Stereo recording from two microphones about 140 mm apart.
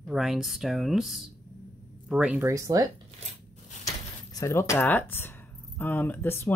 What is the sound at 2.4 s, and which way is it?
Speech, 25° right (ahead or behind).